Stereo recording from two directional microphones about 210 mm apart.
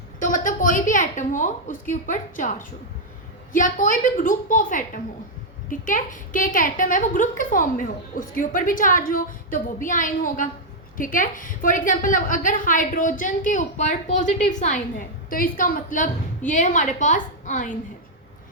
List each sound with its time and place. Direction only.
0.2 s a woman's voice: 40° left (ahead or behind)